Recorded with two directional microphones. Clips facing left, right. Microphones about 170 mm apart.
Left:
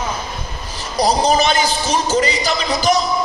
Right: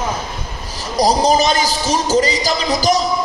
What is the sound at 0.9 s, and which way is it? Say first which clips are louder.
Speech: right 1 dB; 40° right (ahead or behind).